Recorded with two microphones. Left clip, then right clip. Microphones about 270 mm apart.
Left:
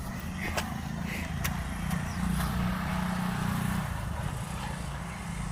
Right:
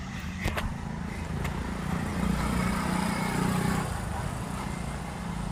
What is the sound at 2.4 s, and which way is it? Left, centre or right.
Vehicle, right.